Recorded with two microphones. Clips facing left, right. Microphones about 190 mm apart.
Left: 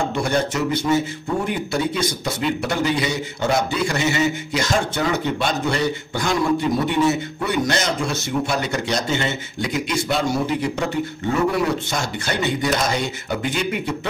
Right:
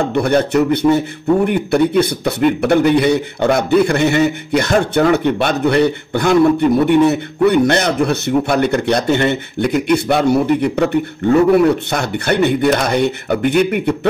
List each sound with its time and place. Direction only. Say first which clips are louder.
0.1 s speech: right 8 dB; 60° right (ahead or behind)